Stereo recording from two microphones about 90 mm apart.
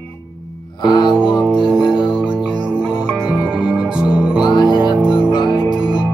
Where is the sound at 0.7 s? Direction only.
50° left (ahead or behind).